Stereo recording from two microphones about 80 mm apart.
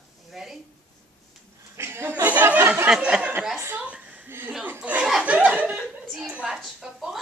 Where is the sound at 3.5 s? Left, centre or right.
Right.